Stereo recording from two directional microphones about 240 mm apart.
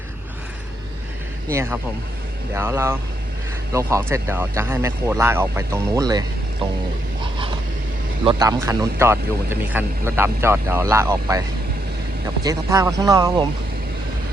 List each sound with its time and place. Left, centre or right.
1.5 s a man's voice: centre
8.2 s a man's voice: centre